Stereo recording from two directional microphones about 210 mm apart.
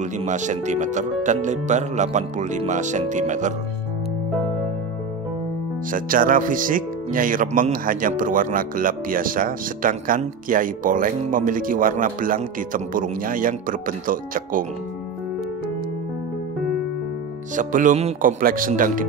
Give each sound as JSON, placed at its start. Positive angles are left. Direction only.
{"t": 0.0, "sound": "speech", "side_deg": -35}
{"t": 5.9, "sound": "speech", "side_deg": -40}
{"t": 17.6, "sound": "speech", "side_deg": -40}